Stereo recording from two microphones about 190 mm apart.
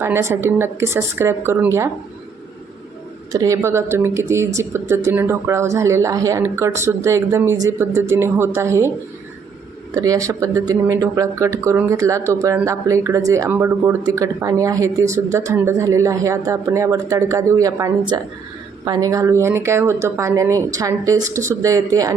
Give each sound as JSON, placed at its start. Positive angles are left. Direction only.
{"t": 0.0, "sound": "speech", "side_deg": -15}
{"t": 3.3, "sound": "speech", "side_deg": -15}
{"t": 9.9, "sound": "speech", "side_deg": -15}